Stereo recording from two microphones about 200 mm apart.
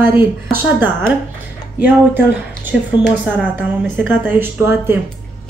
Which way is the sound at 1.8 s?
10° right (ahead or behind).